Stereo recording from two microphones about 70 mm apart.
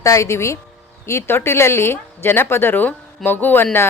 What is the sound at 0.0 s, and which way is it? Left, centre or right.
Speech, left.